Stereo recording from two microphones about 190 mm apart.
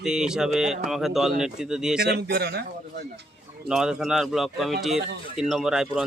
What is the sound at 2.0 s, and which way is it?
Speech, 60° right (ahead or behind).